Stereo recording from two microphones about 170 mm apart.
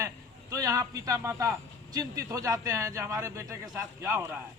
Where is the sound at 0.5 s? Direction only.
20° right (ahead or behind).